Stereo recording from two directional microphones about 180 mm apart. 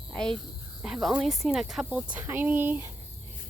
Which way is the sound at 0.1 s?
5° left (ahead or behind).